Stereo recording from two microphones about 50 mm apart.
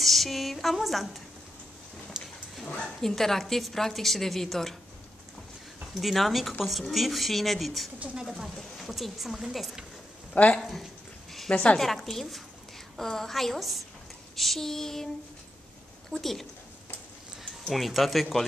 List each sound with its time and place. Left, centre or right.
0.0 s a woman's voice: centre
2.1 s dog: centre
2.8 s speech: centre
5.9 s speech: centre
8.5 s speech: centre
10.3 s speech: left
10.6 s speech: centre
11.5 s speech: left
11.8 s speech: centre
14.3 s a sound: centre
16.1 s speech: centre
17.6 s speech: centre